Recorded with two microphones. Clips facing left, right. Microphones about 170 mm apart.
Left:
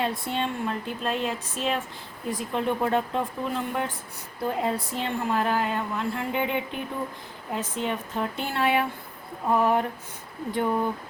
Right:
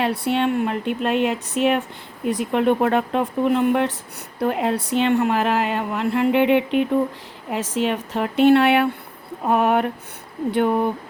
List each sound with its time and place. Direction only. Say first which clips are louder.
0.0 s a woman's voice: right 7 dB; 70° right (ahead or behind)